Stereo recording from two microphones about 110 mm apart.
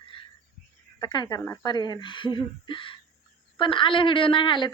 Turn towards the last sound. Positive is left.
turn(degrees=45)  # may be behind; listen again after turning